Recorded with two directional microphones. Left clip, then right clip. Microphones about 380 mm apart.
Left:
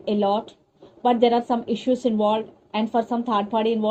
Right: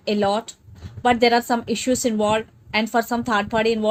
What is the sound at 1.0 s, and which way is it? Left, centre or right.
Speech, right.